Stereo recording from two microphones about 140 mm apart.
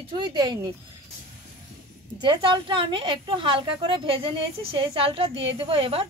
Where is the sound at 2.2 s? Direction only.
35° right (ahead or behind).